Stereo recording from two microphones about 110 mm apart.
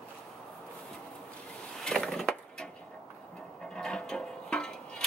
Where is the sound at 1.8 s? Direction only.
5° left (ahead or behind).